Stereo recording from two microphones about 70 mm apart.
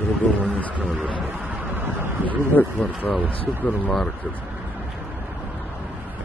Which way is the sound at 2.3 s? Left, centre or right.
Left.